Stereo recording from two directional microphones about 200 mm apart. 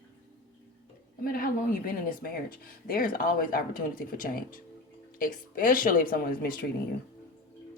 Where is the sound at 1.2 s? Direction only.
45° left (ahead or behind).